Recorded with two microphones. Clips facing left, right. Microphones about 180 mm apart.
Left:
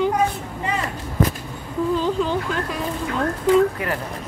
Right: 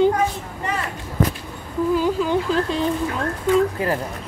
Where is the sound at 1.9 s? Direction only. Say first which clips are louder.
Right 2 dB; 10° right (ahead or behind).